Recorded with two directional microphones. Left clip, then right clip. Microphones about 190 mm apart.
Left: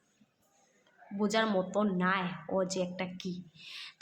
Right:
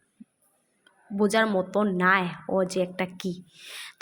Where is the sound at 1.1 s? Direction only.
30° right (ahead or behind).